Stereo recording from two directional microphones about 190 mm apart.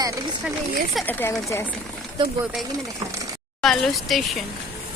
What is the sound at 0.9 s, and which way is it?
Speech, 5° left (ahead or behind).